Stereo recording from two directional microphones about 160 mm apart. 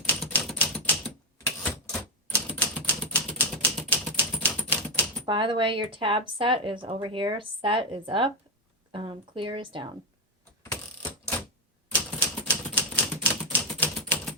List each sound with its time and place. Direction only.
0.3 s typewriter: centre (ahead or behind)
5.2 s speech: 30° right (ahead or behind)
12.4 s typewriter: 10° left (ahead or behind)